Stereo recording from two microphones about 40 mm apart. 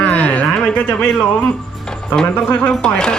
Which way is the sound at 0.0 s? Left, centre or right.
Left.